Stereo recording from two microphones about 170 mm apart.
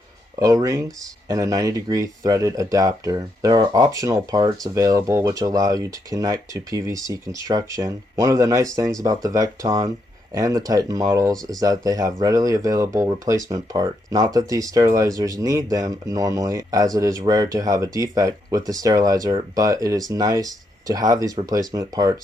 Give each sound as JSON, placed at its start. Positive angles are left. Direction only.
{"t": 0.4, "sound": "speech", "side_deg": -20}